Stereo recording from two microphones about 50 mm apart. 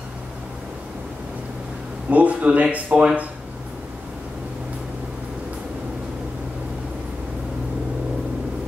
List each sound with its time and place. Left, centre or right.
2.0 s speech: right